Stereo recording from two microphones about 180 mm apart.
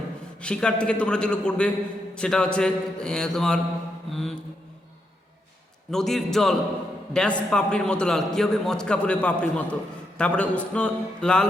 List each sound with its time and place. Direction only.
0.4 s a man's voice: 5° left (ahead or behind)
5.9 s a man's voice: centre (ahead or behind)